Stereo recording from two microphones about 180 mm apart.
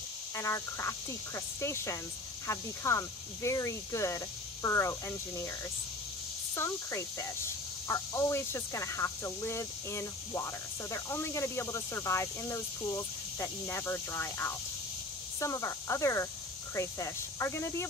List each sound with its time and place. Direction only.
0.4 s speech: 15° left (ahead or behind)
6.5 s speech: 15° left (ahead or behind)